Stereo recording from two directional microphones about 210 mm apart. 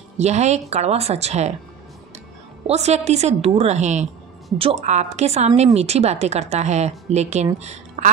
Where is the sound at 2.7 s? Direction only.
30° right (ahead or behind).